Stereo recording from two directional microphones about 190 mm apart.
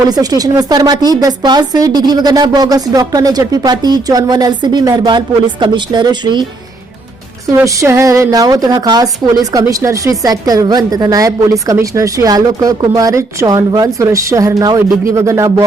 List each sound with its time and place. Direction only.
0.1 s a woman's voice: 20° right (ahead or behind)
7.4 s a woman's voice: 15° right (ahead or behind)